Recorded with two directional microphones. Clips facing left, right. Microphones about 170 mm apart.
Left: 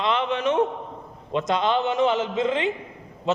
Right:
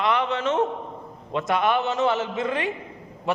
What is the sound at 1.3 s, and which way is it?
A man's voice, 20° left (ahead or behind).